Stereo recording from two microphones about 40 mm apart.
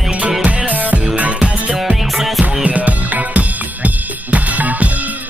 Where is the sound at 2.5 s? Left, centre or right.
Right.